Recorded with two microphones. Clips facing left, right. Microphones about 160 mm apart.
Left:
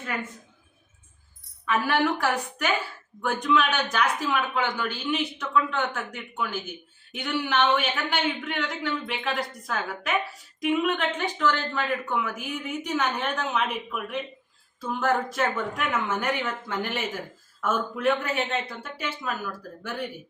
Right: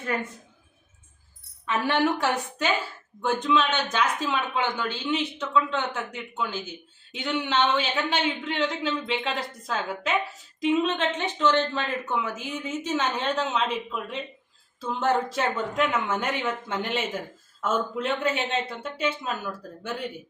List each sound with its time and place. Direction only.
1.6 s speech: 30° right (ahead or behind)